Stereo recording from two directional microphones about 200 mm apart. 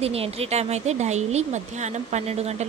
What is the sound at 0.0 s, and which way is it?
Speech, 30° right (ahead or behind).